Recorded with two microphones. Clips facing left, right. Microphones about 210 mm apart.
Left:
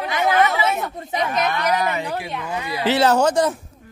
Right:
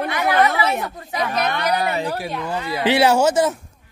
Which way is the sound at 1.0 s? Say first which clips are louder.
Left 1 dB; 25° left (ahead or behind).